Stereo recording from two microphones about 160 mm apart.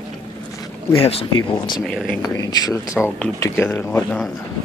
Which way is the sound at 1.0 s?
35° left (ahead or behind).